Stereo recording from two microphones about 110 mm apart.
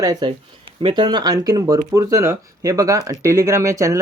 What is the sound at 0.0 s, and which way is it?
Speech, 35° right (ahead or behind).